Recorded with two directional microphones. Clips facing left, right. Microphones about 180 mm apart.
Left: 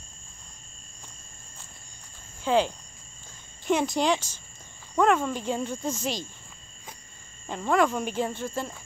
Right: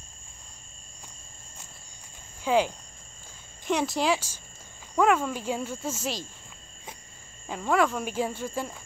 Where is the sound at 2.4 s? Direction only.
10° right (ahead or behind).